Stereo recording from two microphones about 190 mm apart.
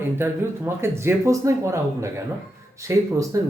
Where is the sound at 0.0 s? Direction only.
10° right (ahead or behind).